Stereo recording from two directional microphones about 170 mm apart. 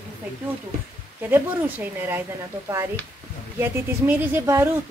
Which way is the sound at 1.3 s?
10° right (ahead or behind).